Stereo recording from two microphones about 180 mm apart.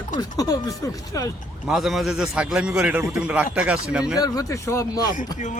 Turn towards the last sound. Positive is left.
turn(degrees=20)  # may be behind; listen again after turning